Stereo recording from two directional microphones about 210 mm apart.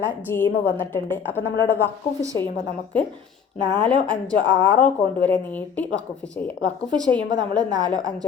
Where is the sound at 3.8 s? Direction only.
5° left (ahead or behind).